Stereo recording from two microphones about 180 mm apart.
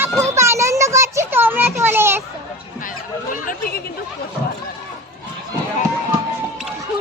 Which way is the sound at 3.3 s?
50° left (ahead or behind).